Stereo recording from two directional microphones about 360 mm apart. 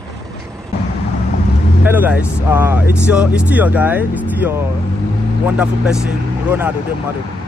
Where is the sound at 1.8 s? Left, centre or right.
Centre.